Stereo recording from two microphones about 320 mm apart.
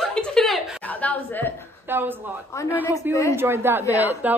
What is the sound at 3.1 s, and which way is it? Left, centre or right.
Speech, centre.